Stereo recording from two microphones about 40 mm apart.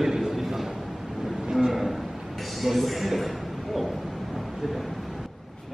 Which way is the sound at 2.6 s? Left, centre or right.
Centre.